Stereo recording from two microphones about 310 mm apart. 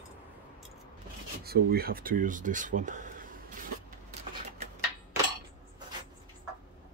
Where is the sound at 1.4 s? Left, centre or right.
Right.